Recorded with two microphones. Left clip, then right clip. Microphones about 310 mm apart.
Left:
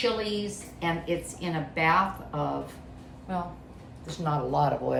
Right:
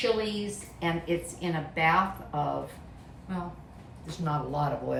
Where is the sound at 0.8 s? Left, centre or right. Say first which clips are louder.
Left 1 dB; centre.